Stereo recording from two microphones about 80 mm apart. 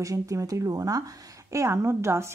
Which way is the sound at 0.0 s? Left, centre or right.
Right.